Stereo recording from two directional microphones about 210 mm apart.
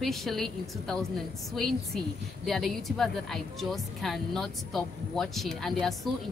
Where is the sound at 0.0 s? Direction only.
Centre (ahead or behind).